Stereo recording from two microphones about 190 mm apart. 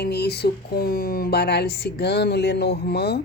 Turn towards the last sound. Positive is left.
turn(degrees=60)  # may be behind; listen again after turning